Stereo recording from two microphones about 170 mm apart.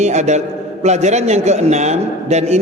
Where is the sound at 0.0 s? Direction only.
40° right (ahead or behind).